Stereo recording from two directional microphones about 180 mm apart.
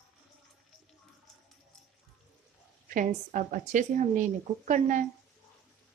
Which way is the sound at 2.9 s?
45° right (ahead or behind).